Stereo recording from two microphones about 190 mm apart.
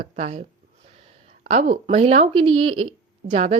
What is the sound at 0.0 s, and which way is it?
Speech, 35° right (ahead or behind).